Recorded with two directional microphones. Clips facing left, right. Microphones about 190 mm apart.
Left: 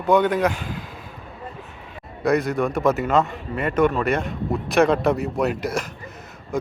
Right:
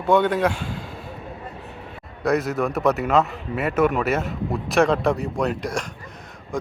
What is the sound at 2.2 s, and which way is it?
A man's voice, centre (ahead or behind).